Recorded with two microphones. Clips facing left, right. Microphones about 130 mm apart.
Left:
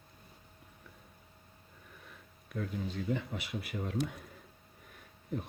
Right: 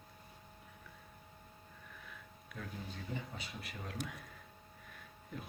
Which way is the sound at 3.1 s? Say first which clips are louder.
Left 6 dB; 65° left (ahead or behind).